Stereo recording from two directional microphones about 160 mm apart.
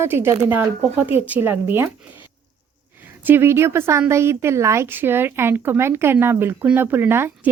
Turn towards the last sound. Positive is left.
turn(degrees=-15)  # may be behind; listen again after turning